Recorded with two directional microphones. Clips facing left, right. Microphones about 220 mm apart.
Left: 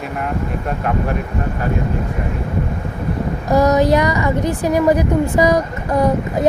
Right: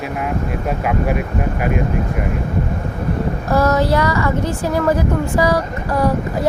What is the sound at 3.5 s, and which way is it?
A woman's voice, 15° left (ahead or behind).